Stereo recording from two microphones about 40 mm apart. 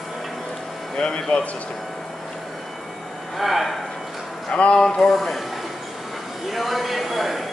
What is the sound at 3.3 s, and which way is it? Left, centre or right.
Speech, centre.